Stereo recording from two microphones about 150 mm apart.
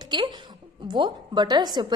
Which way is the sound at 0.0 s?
30° right (ahead or behind).